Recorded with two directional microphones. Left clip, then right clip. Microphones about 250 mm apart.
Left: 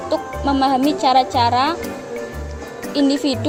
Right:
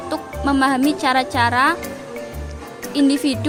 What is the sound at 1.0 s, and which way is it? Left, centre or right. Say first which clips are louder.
Speech: left 5 dB; right.